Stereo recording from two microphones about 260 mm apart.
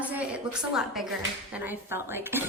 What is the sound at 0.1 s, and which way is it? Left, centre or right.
A woman's voice, centre.